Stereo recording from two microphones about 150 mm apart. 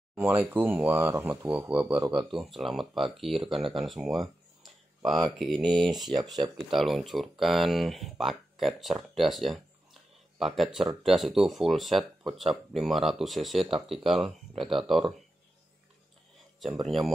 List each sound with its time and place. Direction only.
0.2 s speech: 10° right (ahead or behind)
2.0 s speech: 30° right (ahead or behind)
2.3 s speech: centre (ahead or behind)
5.4 s speech: centre (ahead or behind)
16.8 s speech: centre (ahead or behind)